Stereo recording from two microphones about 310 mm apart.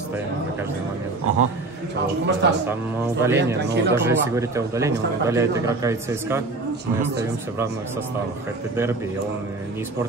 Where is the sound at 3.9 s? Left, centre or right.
Centre.